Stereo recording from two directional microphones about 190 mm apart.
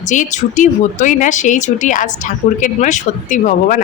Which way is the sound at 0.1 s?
40° left (ahead or behind).